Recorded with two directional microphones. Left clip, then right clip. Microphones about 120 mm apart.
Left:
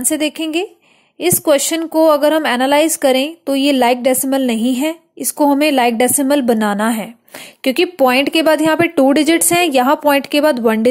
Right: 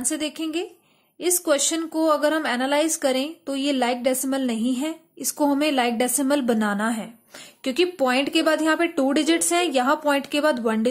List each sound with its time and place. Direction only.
0.0 s a woman's voice: 45° left (ahead or behind)